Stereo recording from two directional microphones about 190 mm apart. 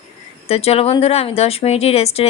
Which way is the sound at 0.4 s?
30° left (ahead or behind).